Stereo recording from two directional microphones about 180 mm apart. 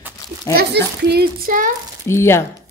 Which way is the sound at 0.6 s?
65° right (ahead or behind).